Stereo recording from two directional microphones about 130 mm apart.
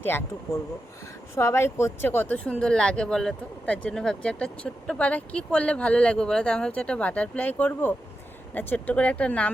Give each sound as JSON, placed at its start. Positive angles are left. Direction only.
{"t": 0.0, "sound": "speech", "side_deg": 15}